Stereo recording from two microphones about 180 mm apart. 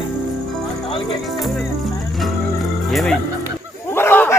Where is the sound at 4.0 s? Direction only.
10° left (ahead or behind).